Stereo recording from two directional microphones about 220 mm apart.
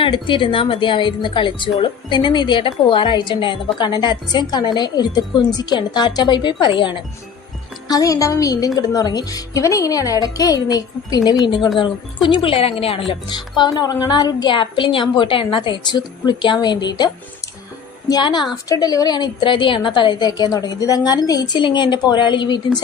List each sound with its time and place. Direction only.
0.0 s a woman's voice: 20° left (ahead or behind)
18.1 s a woman's voice: 20° left (ahead or behind)